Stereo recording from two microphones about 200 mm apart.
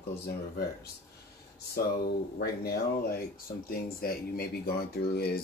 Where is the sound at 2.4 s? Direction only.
50° left (ahead or behind).